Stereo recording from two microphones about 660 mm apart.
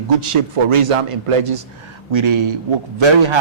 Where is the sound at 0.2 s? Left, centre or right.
Right.